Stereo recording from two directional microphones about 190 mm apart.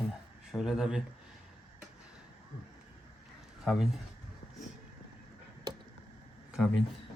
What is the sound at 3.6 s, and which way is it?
Speech, centre (ahead or behind).